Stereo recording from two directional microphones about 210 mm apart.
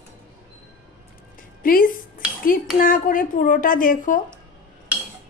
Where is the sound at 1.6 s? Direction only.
40° left (ahead or behind).